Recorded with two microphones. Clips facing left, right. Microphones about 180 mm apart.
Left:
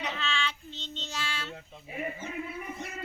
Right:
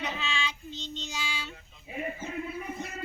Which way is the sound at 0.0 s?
10° right (ahead or behind).